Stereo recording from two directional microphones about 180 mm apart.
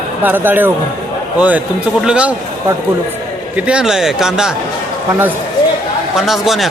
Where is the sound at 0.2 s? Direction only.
10° right (ahead or behind).